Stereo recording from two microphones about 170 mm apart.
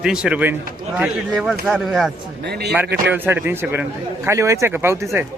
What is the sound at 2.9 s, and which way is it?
A man's voice, 10° right (ahead or behind).